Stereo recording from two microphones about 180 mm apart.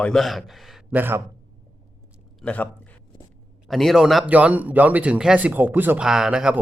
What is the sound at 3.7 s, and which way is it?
A man's voice, centre (ahead or behind).